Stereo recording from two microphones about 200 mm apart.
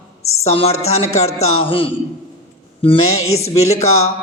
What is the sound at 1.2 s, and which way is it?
Music, 90° left.